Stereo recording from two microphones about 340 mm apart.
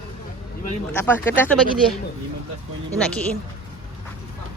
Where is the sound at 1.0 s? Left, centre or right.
Centre.